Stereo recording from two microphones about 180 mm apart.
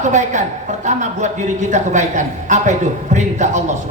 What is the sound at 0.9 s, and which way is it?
A man's voice, 40° right (ahead or behind).